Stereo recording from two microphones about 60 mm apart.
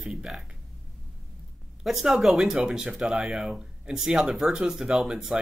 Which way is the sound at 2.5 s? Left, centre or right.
Centre.